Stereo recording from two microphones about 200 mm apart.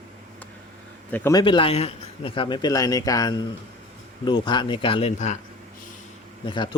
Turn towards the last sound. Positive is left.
turn(degrees=25)  # may be behind; listen again after turning